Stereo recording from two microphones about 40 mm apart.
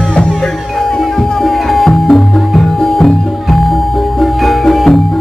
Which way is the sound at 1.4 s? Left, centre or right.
Centre.